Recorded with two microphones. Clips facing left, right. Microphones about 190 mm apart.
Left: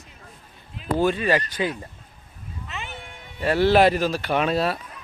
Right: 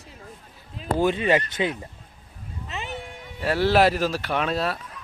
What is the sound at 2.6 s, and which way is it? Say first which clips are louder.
Meow: right 3 dB; 35° right (ahead or behind).